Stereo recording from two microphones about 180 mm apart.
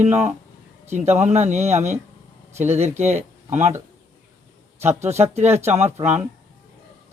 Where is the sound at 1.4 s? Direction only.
40° right (ahead or behind).